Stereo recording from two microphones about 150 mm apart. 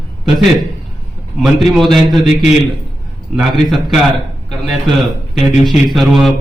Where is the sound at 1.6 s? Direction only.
Centre (ahead or behind).